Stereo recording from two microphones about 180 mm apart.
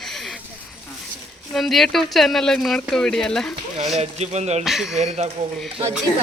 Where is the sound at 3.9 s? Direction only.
40° right (ahead or behind).